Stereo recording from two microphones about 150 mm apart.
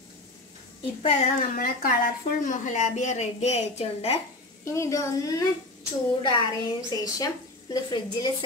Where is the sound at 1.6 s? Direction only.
75° left (ahead or behind).